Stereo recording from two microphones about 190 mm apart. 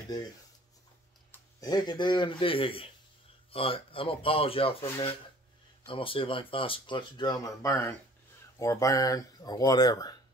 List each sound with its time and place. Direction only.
1.3 s speech: 20° left (ahead or behind)
5.9 s speech: 25° left (ahead or behind)